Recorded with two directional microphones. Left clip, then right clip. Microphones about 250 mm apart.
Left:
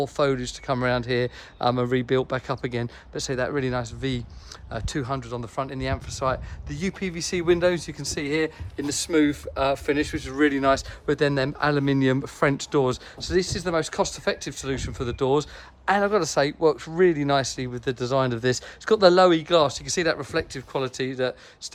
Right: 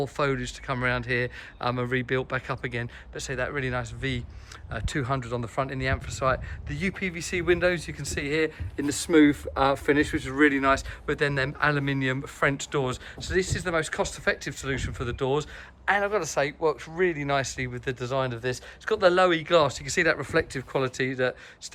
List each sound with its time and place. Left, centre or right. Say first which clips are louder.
0.0 s speech: left 4 dB; centre
8.8 s a woman's voice: right 2 dB; centre